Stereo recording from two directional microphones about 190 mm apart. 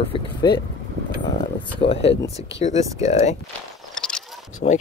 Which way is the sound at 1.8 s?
30° left (ahead or behind).